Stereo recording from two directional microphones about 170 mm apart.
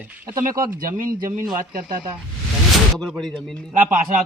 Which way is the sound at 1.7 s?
55° right (ahead or behind).